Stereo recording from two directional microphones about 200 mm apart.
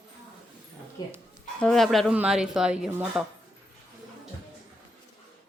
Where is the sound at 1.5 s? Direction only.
5° left (ahead or behind).